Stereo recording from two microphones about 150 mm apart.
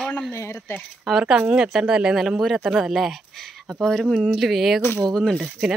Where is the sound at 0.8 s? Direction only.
5° right (ahead or behind).